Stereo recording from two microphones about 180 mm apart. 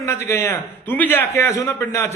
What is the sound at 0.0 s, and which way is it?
A man's voice, 15° left (ahead or behind).